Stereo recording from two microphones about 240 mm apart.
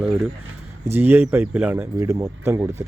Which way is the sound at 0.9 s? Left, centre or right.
Centre.